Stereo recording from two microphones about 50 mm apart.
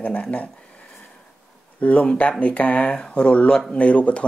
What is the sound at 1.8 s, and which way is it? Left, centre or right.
Speech, left.